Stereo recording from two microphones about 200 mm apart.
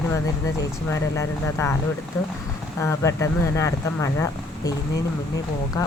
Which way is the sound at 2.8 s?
15° left (ahead or behind).